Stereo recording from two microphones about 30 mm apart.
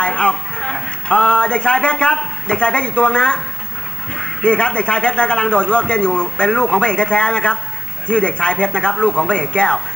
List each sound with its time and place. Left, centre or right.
0.0 s a man's voice: left